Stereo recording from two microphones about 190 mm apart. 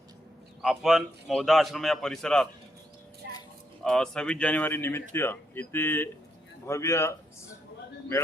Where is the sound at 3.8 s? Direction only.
5° left (ahead or behind).